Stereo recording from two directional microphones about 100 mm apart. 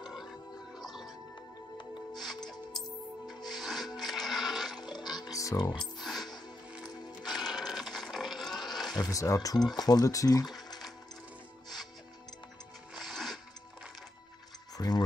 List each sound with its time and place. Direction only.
0.0 s music: 5° right (ahead or behind)
2.1 s music: centre (ahead or behind)
4.9 s music: 45° left (ahead or behind)
5.8 s music: centre (ahead or behind)
6.7 s music: 10° right (ahead or behind)
8.6 s a sound: centre (ahead or behind)
8.9 s speech: 35° left (ahead or behind)
12.9 s music: centre (ahead or behind)
14.8 s speech: 45° left (ahead or behind)